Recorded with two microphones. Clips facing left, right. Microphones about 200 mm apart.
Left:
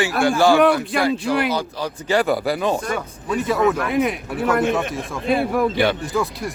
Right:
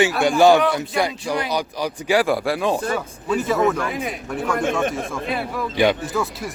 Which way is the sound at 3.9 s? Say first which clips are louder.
Left 7 dB; 60° left (ahead or behind).